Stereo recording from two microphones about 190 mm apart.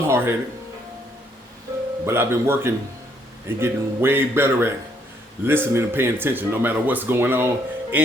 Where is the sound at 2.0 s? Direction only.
15° right (ahead or behind).